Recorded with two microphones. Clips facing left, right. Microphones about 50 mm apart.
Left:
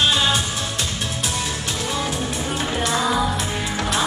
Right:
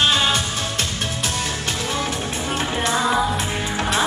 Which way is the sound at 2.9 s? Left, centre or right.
Centre.